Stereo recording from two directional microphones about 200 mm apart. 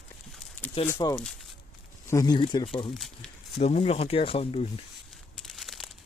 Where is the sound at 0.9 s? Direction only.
20° left (ahead or behind).